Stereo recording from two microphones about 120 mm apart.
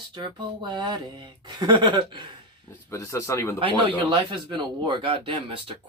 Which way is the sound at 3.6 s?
45° right (ahead or behind).